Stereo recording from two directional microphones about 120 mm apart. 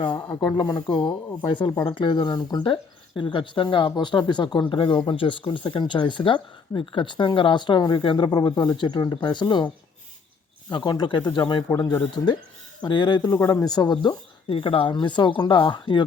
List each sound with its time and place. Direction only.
0.0 s speech: 35° left (ahead or behind)
3.2 s speech: 45° left (ahead or behind)
10.7 s speech: 35° left (ahead or behind)